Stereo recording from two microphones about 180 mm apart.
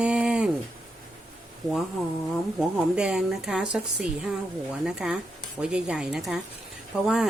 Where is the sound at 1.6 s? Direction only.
20° right (ahead or behind).